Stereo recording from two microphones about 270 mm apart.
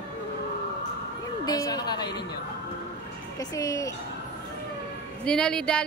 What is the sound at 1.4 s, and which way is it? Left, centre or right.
Speech, centre.